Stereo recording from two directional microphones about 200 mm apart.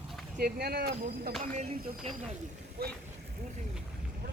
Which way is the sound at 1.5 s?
35° right (ahead or behind).